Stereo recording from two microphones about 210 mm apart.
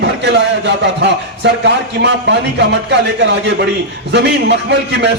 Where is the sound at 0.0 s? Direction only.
55° right (ahead or behind).